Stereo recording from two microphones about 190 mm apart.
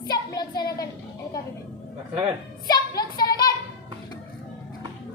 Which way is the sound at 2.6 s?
20° left (ahead or behind).